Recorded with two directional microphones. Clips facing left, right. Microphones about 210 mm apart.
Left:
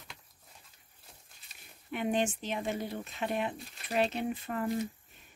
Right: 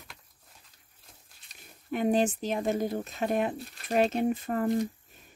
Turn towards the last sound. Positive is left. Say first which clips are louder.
# right 5 dB
turn(degrees=-45)  # may be behind; listen again after turning